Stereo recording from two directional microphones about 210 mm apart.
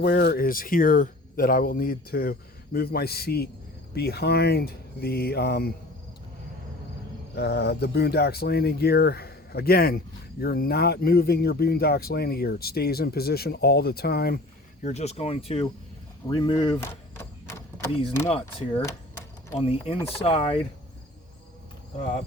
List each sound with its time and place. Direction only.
0.0 s speech: 50° left (ahead or behind)
7.3 s speech: 50° left (ahead or behind)
14.8 s speech: 30° left (ahead or behind)
16.3 s a sound: 20° left (ahead or behind)
18.3 s speech: 25° left (ahead or behind)